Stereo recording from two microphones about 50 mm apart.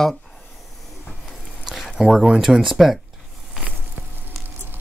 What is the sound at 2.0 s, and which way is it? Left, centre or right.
Speech, centre.